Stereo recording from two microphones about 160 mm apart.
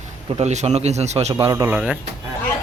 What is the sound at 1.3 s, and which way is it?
Speech, 20° right (ahead or behind).